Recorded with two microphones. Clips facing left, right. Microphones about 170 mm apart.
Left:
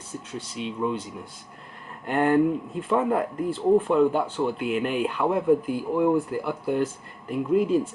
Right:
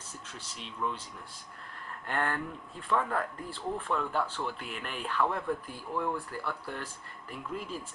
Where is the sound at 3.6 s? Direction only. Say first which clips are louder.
Left 14 dB; 30° left (ahead or behind).